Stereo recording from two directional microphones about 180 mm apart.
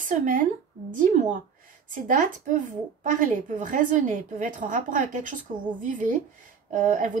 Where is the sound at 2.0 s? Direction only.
45° right (ahead or behind).